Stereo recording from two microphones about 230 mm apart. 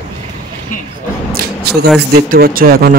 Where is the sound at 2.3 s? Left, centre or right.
Right.